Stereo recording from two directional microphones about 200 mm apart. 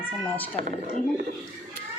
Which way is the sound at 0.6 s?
40° right (ahead or behind).